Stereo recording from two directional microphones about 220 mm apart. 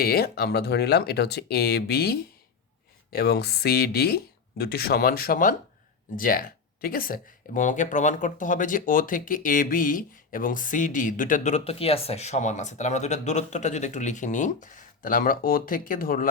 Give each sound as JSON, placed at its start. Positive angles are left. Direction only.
{"t": 0.0, "sound": "speech", "side_deg": 45}